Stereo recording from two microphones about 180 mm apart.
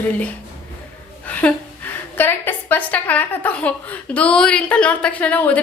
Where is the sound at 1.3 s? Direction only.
10° left (ahead or behind).